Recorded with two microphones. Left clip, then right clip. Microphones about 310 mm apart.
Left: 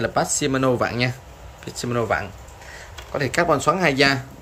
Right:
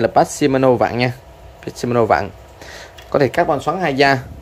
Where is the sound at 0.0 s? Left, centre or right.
Centre.